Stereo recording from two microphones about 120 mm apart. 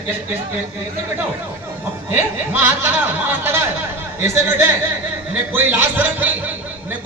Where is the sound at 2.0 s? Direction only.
20° right (ahead or behind).